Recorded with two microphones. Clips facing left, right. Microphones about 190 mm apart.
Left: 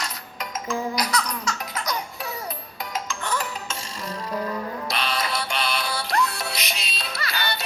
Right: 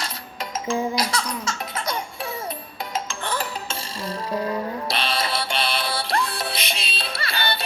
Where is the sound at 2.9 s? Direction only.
30° right (ahead or behind).